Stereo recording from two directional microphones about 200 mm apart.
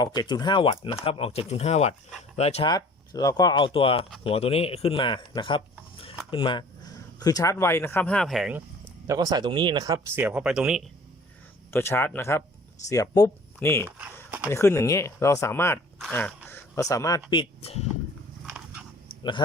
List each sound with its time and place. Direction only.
0.0 s speech: 20° left (ahead or behind)
2.6 s speech: 20° left (ahead or behind); by 8.6 s 5° right (ahead or behind)
9.0 s speech: 20° right (ahead or behind); by 10.8 s 5° right (ahead or behind)
11.7 s speech: 10° left (ahead or behind)
14.3 s dog: 10° right (ahead or behind)
14.5 s speech: 10° left (ahead or behind)
18.4 s biting: 5° right (ahead or behind)